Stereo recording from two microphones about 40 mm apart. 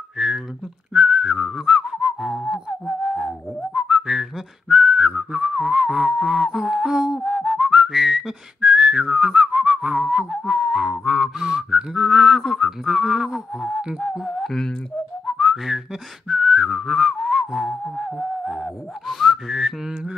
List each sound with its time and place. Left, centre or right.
0.9 s whistling: centre
3.8 s whistling: centre; by 5.9 s right
5.9 s music: centre
7.2 s whistling: centre
8.5 s whistling: right
10.4 s whistling: centre
13.7 s a sound: right
14.2 s a sound: centre
15.3 s whistling: centre
19.0 s whistling: centre